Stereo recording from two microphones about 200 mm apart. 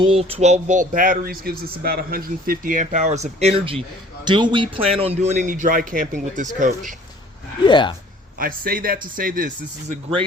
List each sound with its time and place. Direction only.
0.0 s speech: 30° right (ahead or behind)
4.3 s speech: 25° right (ahead or behind); by 6.9 s 40° right (ahead or behind)
7.6 s speech: 25° left (ahead or behind)
8.4 s speech: 45° right (ahead or behind)